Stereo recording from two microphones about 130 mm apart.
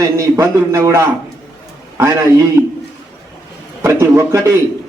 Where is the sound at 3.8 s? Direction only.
20° right (ahead or behind).